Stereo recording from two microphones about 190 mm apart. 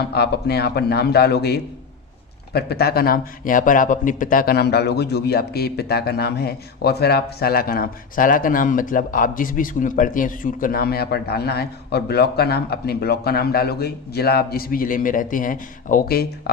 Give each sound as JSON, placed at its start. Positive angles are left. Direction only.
{"t": 0.1, "sound": "speech", "side_deg": 60}